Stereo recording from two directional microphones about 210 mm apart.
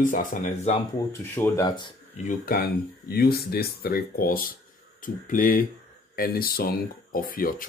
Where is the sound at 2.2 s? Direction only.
40° left (ahead or behind).